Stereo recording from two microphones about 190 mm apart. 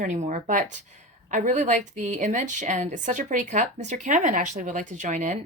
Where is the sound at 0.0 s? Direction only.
40° right (ahead or behind).